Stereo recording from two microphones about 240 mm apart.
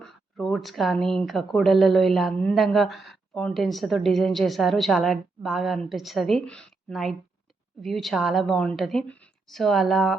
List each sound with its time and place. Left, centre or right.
0.0 s speech: centre